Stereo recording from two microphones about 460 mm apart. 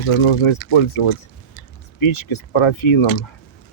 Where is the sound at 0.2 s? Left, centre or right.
Left.